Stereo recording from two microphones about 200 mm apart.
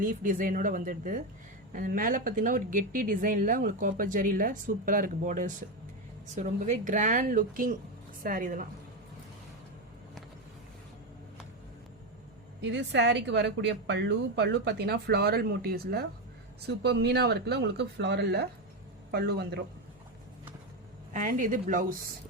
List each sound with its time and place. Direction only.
0.0 s a woman's voice: 40° right (ahead or behind)
12.6 s a woman's voice: 60° right (ahead or behind)
21.1 s a woman's voice: 40° right (ahead or behind)